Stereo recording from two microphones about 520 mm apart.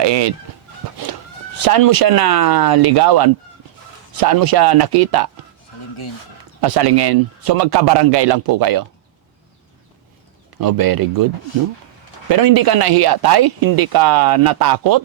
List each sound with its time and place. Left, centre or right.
0.0 s a man's voice: right
1.5 s a man's voice: right
6.6 s a man's voice: right
10.6 s speech: right
12.3 s a man's voice: right